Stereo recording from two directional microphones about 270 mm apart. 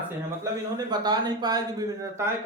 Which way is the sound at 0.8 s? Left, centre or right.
Centre.